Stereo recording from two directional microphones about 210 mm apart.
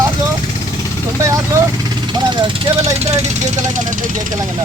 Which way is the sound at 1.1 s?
15° right (ahead or behind).